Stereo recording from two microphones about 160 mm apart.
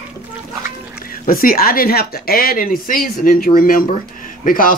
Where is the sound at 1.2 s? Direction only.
60° left (ahead or behind).